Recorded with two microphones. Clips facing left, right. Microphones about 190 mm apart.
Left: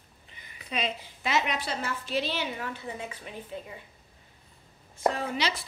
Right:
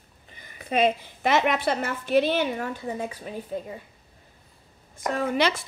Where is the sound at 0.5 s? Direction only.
50° right (ahead or behind).